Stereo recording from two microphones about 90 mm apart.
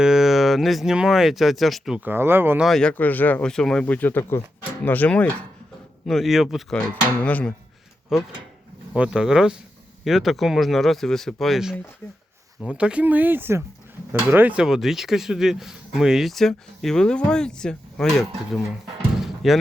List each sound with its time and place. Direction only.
0.0 s speech: 5° right (ahead or behind)
2.0 s speech: 25° right (ahead or behind)
2.6 s speech: 5° left (ahead or behind)
3.0 s speech: 20° left (ahead or behind)
3.4 s speech: 5° left (ahead or behind)
6.1 s speech: centre (ahead or behind)
6.7 s speech: 15° left (ahead or behind)
8.1 s speech: 5° right (ahead or behind)
12.6 s speech: 10° right (ahead or behind)
19.1 s a sound: 5° right (ahead or behind)